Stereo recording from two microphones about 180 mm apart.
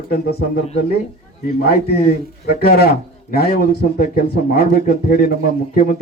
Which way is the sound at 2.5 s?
60° left (ahead or behind).